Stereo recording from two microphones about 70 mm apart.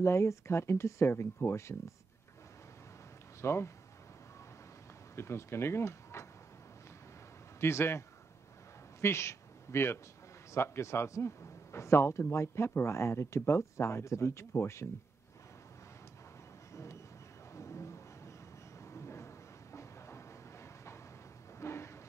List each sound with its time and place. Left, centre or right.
0.0 s a man's voice: left
3.3 s speech: left
5.1 s speech: left
7.6 s a man's voice: left
9.0 s a man's voice: left
16.7 s vehicle: left
17.6 s a sound: left